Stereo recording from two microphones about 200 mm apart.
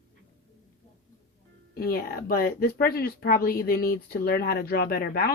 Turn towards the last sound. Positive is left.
turn(degrees=50)  # may be behind; listen again after turning